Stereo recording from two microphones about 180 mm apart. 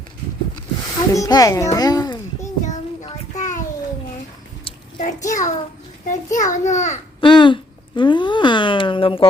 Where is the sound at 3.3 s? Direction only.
45° left (ahead or behind).